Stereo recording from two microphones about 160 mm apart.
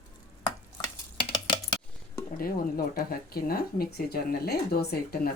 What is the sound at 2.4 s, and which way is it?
Speech, 65° left (ahead or behind).